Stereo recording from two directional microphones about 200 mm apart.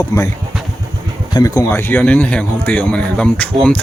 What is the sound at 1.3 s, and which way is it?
Speech, 15° left (ahead or behind).